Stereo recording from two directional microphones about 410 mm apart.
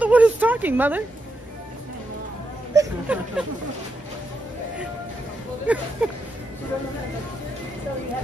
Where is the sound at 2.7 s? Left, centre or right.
Centre.